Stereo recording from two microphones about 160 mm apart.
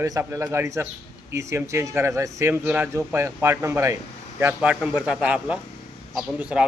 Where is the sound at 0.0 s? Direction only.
20° right (ahead or behind).